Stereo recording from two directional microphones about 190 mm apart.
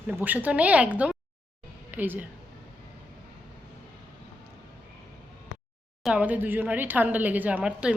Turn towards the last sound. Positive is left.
turn(degrees=-5)  # may be behind; listen again after turning